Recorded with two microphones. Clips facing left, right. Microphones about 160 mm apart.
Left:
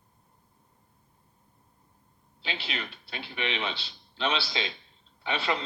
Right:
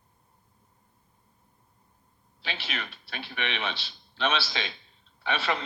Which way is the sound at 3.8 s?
20° left (ahead or behind).